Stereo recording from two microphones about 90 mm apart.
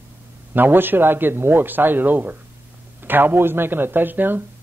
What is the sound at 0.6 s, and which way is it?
A man's voice, 20° right (ahead or behind).